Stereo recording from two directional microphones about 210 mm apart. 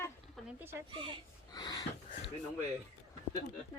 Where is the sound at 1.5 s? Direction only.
20° left (ahead or behind).